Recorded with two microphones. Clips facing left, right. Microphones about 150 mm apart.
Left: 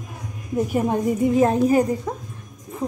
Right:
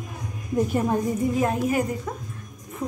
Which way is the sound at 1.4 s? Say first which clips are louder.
Left 8 dB; 35° left (ahead or behind).